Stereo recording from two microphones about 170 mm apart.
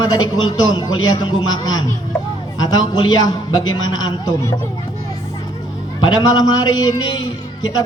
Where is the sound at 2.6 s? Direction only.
25° left (ahead or behind).